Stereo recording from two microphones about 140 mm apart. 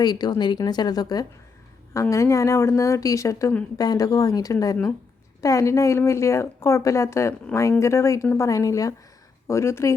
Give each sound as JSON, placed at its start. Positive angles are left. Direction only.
{"t": 0.0, "sound": "a woman's voice", "side_deg": 30}